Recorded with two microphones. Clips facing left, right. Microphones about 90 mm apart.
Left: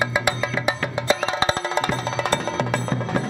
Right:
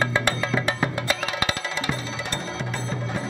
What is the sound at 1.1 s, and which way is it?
Music, 30° left (ahead or behind).